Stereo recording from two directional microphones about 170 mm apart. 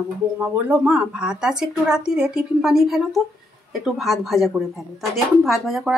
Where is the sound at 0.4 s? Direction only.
10° right (ahead or behind).